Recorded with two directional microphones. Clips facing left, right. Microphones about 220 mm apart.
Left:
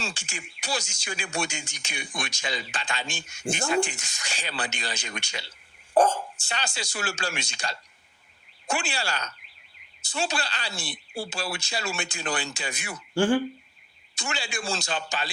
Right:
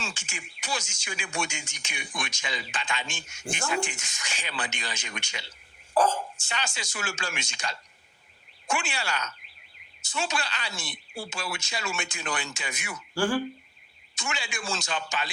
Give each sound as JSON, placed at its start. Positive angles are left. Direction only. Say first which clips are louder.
{"t": 0.0, "sound": "speech", "louder": "left 2 dB", "side_deg": 35}
{"t": 14.2, "sound": "speech", "louder": "left 2 dB", "side_deg": 35}